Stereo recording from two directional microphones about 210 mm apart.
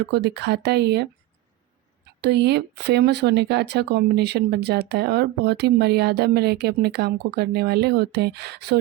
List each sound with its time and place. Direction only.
0.0 s speech: 50° right (ahead or behind)
2.2 s speech: 55° right (ahead or behind)